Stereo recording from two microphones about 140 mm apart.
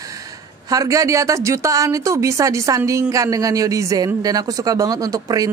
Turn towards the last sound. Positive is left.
turn(degrees=-25)  # may be behind; listen again after turning